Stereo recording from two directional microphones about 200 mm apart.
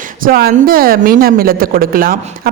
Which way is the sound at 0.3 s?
50° right (ahead or behind).